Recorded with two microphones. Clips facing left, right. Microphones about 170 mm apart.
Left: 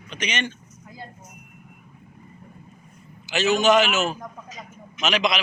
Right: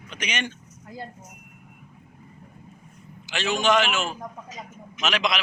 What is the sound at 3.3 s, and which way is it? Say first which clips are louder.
A man's voice: left 4 dB; 5° left (ahead or behind).